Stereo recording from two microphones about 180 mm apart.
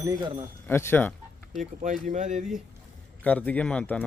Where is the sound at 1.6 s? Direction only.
40° right (ahead or behind).